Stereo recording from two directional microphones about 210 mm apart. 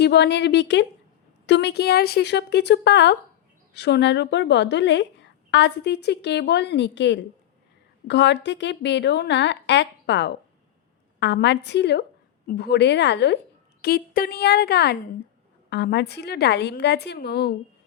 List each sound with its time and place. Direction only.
0.0 s a woman's voice: 50° left (ahead or behind)